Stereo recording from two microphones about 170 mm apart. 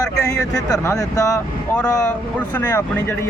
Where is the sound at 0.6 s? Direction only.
20° left (ahead or behind).